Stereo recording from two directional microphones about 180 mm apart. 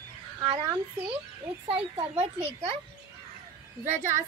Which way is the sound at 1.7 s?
30° right (ahead or behind).